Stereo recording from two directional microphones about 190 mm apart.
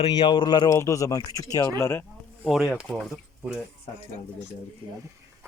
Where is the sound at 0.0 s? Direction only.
25° left (ahead or behind).